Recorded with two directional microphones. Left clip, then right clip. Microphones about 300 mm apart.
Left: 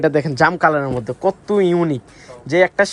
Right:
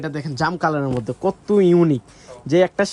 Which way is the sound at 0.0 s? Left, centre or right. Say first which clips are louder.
Left 12 dB; centre.